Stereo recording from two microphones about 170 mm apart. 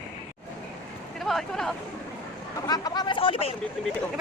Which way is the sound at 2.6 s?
25° left (ahead or behind).